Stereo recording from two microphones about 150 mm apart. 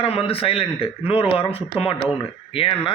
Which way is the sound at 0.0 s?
40° left (ahead or behind).